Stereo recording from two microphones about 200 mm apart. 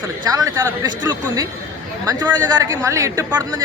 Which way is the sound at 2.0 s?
20° right (ahead or behind).